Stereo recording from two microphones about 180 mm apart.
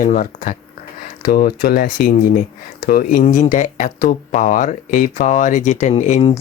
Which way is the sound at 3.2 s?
40° left (ahead or behind).